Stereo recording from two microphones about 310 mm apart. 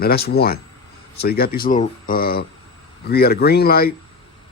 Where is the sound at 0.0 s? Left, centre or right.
Left.